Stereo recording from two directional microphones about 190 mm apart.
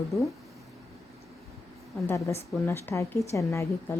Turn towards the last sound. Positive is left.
turn(degrees=15)  # may be behind; listen again after turning